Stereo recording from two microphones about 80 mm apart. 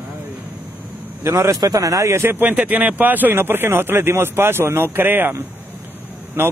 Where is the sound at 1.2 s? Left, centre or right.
Right.